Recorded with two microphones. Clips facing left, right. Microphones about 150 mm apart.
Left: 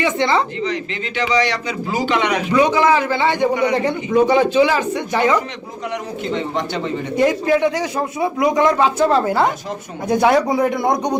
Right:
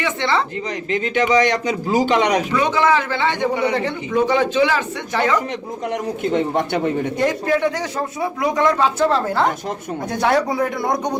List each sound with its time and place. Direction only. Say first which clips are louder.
0.0 s speech: left 3 dB; 15° left (ahead or behind)
0.6 s a man's voice: right 1 dB; 45° right (ahead or behind)
2.5 s speech: left 3 dB; 15° left (ahead or behind)
6.2 s a man's voice: right 4 dB; 50° right (ahead or behind)
7.2 s speech: left 5 dB; 10° left (ahead or behind)